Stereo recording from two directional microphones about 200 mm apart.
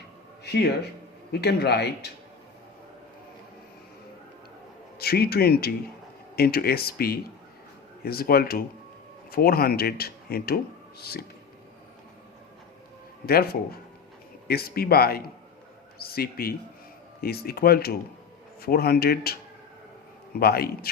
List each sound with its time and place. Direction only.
0.4 s a man's voice: 55° left (ahead or behind)
4.9 s speech: 50° left (ahead or behind)
13.2 s speech: 50° left (ahead or behind)
20.4 s speech: 50° left (ahead or behind)